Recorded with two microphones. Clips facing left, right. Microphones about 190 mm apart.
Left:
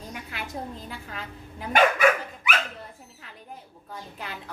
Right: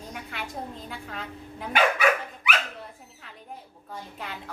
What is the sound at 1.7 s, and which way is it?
Dog, 45° left (ahead or behind).